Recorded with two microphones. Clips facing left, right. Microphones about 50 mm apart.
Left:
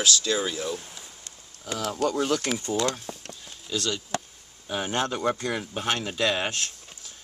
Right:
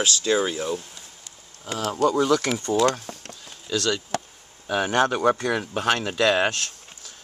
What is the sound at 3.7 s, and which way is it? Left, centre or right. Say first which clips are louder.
Speech: right 4 dB; right.